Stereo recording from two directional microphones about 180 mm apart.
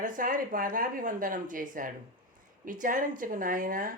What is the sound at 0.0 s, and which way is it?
Speech, 50° right (ahead or behind).